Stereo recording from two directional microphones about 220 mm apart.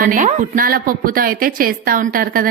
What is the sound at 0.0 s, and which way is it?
A woman's voice, 35° right (ahead or behind).